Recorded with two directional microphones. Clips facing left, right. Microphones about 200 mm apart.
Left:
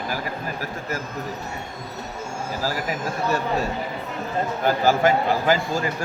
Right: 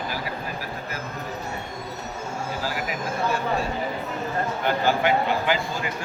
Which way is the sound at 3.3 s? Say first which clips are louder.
Left 4 dB; 40° left (ahead or behind).